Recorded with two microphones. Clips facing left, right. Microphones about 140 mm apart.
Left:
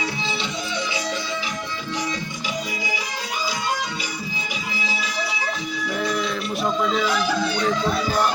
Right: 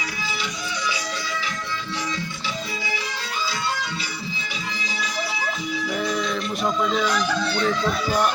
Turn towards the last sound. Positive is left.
turn(degrees=10)  # may be behind; listen again after turning